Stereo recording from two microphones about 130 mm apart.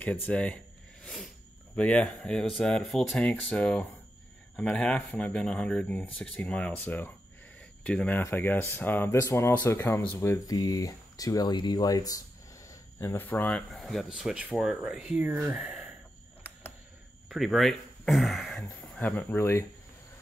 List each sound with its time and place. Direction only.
0.0 s speech: 10° left (ahead or behind)
1.0 s a sound: 5° left (ahead or behind)
1.8 s speech: 10° left (ahead or behind); by 12.2 s 30° left (ahead or behind)
12.6 s speech: 15° left (ahead or behind); by 15.9 s 5° right (ahead or behind)
17.3 s speech: centre (ahead or behind); by 19.6 s 20° left (ahead or behind)